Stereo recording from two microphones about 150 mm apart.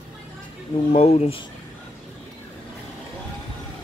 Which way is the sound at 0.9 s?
45° left (ahead or behind).